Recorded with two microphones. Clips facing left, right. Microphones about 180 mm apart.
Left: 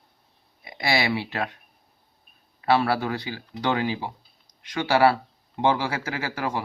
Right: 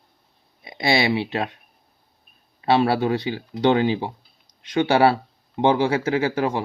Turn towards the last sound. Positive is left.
turn(degrees=-25)  # may be behind; listen again after turning